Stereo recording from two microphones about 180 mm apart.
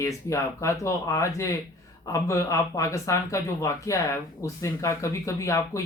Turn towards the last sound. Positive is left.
turn(degrees=15)  # may be behind; listen again after turning